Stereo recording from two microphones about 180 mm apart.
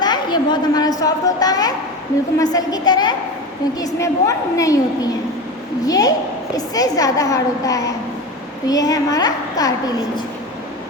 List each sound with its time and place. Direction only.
0.0 s a woman's voice: 25° left (ahead or behind)